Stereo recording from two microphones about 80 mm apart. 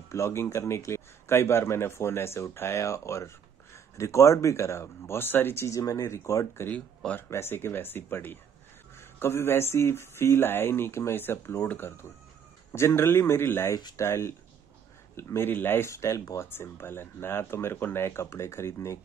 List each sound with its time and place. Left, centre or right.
0.1 s speech: left
15.9 s speech: left
16.4 s speech: left